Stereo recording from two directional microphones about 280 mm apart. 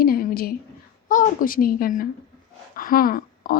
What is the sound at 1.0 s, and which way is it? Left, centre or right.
A woman's voice, left.